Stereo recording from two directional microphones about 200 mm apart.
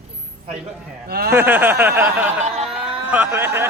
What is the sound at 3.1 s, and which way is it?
Speech, 10° right (ahead or behind).